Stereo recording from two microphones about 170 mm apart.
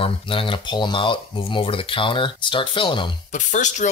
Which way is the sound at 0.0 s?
30° left (ahead or behind).